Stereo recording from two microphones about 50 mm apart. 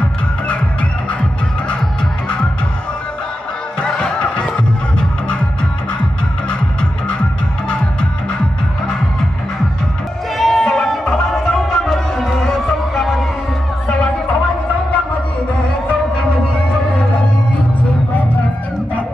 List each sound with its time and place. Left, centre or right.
3.8 s music: centre
10.3 s music: centre